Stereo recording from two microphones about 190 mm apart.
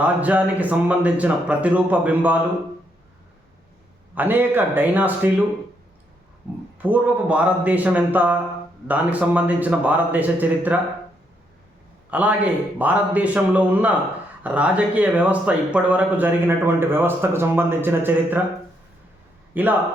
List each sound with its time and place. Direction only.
0.0 s speech: 10° right (ahead or behind)
4.1 s speech: 10° right (ahead or behind)
6.8 s speech: 10° right (ahead or behind)
12.1 s speech: 10° right (ahead or behind)
19.6 s speech: 10° right (ahead or behind)